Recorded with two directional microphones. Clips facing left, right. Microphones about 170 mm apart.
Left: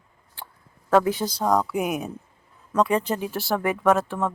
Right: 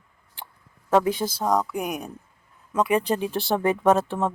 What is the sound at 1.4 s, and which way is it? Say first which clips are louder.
Speech: left 3 dB; centre (ahead or behind).